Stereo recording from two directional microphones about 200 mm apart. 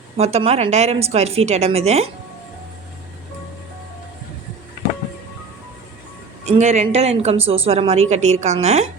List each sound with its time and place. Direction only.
0.2 s a woman's voice: 30° right (ahead or behind)
6.4 s a woman's voice: 35° right (ahead or behind)